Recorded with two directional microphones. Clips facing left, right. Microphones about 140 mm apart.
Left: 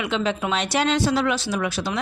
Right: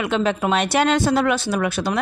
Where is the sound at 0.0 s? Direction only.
50° right (ahead or behind).